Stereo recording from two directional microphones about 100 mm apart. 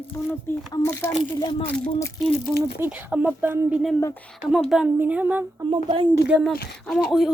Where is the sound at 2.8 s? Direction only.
15° right (ahead or behind).